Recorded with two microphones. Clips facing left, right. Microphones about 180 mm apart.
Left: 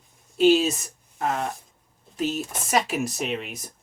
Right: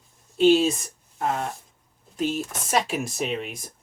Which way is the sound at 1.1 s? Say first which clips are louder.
Even; centre (ahead or behind).